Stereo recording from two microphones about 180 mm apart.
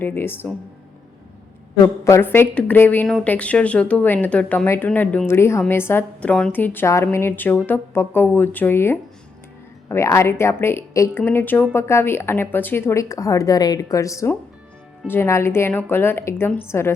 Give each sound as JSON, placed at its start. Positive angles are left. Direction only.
{"t": 0.0, "sound": "speech", "side_deg": 10}
{"t": 1.8, "sound": "speech", "side_deg": 15}